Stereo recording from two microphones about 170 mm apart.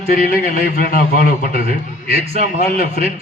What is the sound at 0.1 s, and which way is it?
A man's voice, 60° left (ahead or behind).